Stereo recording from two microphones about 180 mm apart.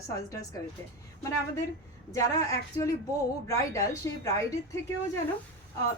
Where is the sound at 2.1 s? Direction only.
20° left (ahead or behind).